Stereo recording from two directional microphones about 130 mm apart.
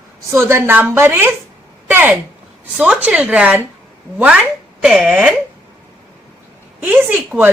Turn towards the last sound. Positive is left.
turn(degrees=-15)  # may be behind; listen again after turning